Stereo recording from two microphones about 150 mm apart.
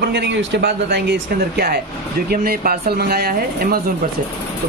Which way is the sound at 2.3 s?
90° right.